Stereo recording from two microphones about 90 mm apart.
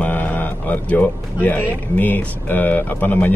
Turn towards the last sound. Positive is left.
turn(degrees=20)  # may be behind; listen again after turning